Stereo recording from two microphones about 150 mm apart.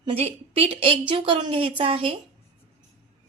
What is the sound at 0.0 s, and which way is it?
A woman's voice, 40° right (ahead or behind).